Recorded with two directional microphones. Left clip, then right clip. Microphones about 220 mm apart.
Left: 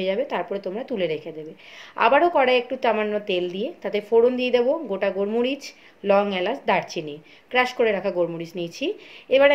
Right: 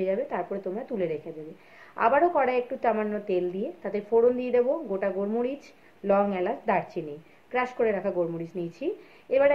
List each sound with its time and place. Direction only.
0.0 s a woman's voice: 40° left (ahead or behind)